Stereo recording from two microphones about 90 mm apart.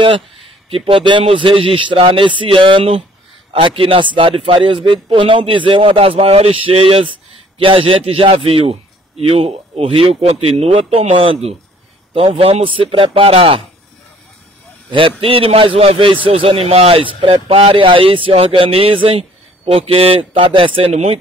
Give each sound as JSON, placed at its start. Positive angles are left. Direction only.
{"t": 0.0, "sound": "speech", "side_deg": -90}
{"t": 14.9, "sound": "speech", "side_deg": -80}